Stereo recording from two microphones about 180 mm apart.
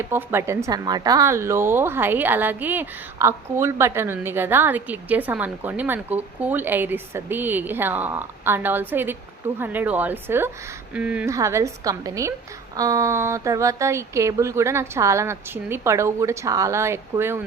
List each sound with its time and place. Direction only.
0.1 s speech: 15° right (ahead or behind)